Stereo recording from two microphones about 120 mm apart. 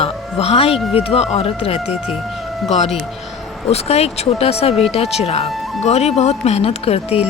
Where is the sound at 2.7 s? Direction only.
65° left (ahead or behind).